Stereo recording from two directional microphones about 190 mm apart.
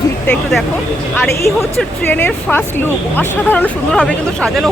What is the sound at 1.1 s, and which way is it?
Speech, 10° left (ahead or behind).